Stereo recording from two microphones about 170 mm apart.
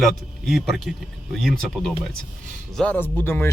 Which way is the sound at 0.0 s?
Centre (ahead or behind).